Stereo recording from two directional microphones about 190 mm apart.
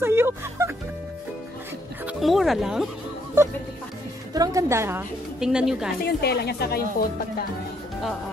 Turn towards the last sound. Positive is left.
turn(degrees=50)  # may be behind; listen again after turning